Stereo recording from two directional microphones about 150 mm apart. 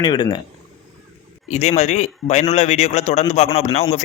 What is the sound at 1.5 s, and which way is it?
A man's voice, 50° left (ahead or behind).